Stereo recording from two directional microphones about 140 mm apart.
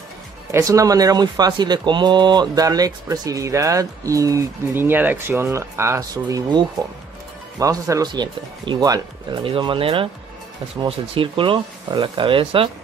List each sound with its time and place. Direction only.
0.5 s speech: 20° right (ahead or behind); by 12.6 s 40° right (ahead or behind)